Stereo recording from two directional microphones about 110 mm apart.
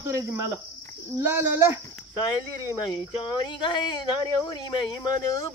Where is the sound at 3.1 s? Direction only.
45° left (ahead or behind).